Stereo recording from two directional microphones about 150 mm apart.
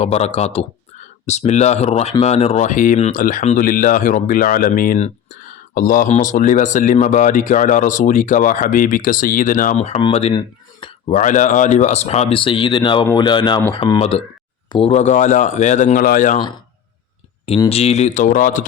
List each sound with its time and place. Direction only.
0.0 s speech: 45° left (ahead or behind); by 4.9 s 70° left (ahead or behind)
4.9 s speech: 55° left (ahead or behind)
9.7 s speech: 45° left (ahead or behind)
10.3 s a sound: 35° left (ahead or behind)
11.1 s speech: 60° left (ahead or behind); by 14.0 s 30° left (ahead or behind)
14.7 s speech: 40° left (ahead or behind); by 16.4 s 60° left (ahead or behind)
17.7 s speech: 45° left (ahead or behind); by 18.6 s 60° left (ahead or behind)